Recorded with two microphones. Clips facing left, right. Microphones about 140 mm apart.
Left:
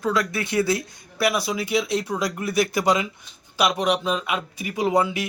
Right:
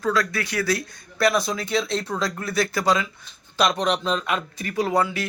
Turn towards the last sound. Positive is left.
turn(degrees=15)  # may be behind; listen again after turning